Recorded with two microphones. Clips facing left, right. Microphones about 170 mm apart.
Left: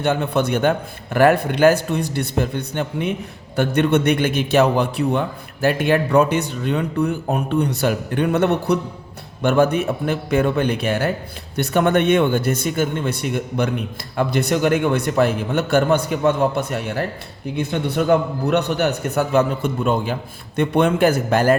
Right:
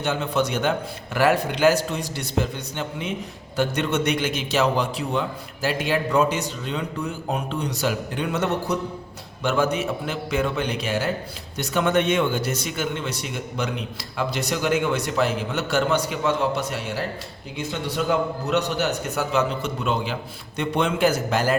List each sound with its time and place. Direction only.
0.0 s a man's voice: 55° left (ahead or behind)
9.4 s a man's voice: 55° left (ahead or behind)